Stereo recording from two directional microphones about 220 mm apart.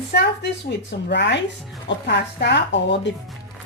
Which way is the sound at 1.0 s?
50° left (ahead or behind).